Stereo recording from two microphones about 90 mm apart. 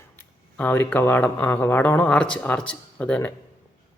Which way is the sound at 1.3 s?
20° left (ahead or behind).